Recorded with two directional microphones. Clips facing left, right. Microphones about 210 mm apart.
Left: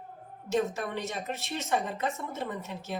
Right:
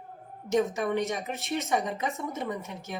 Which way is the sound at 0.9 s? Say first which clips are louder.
Right 5 dB; 15° right (ahead or behind).